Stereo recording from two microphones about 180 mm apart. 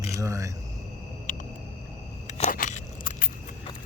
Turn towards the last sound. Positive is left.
turn(degrees=50)  # may be behind; listen again after turning